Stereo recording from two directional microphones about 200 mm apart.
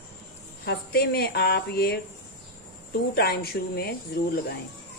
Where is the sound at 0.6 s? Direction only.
50° left (ahead or behind).